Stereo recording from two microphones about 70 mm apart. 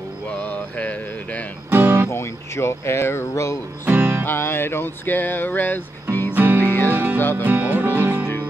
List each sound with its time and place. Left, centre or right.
0.5 s mantra: left
1.7 s music: right
2.0 s speech: left
3.8 s speech: right
4.3 s music: left
6.3 s music: right
6.6 s music: left
6.9 s music: right
7.2 s music: left
7.4 s music: right